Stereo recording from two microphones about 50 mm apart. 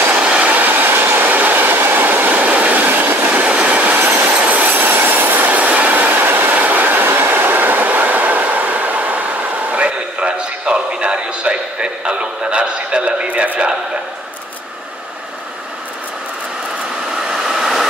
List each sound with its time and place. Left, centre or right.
0.2 s train: right
17.2 s train: centre